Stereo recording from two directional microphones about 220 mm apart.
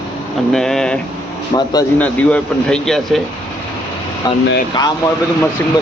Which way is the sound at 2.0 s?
5° left (ahead or behind).